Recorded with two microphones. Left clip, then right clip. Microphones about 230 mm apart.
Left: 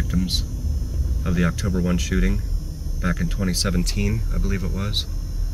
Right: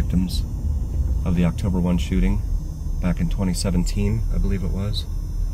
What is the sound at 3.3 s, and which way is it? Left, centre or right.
Speech, centre.